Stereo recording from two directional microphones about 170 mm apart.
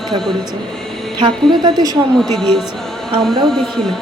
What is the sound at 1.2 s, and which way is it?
Speech, 30° right (ahead or behind).